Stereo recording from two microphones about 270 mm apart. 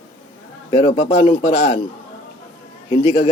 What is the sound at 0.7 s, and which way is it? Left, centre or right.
Speech, left.